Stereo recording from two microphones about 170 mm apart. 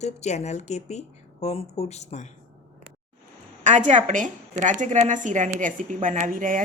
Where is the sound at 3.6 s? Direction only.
45° right (ahead or behind).